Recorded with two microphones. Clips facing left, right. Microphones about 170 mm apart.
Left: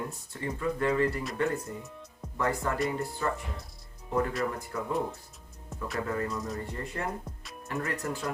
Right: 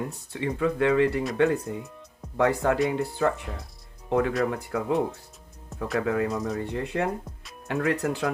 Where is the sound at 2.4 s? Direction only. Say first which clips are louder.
Right 7 dB; 75° right (ahead or behind).